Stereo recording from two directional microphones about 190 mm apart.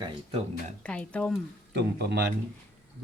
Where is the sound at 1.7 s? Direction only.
65° right (ahead or behind).